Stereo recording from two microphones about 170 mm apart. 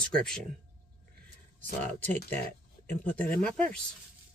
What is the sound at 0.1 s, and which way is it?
Speech, 5° left (ahead or behind).